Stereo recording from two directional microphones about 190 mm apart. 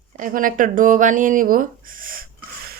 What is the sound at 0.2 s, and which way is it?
Speech, 45° right (ahead or behind).